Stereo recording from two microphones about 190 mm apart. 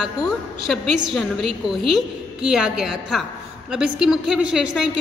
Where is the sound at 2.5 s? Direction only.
5° right (ahead or behind).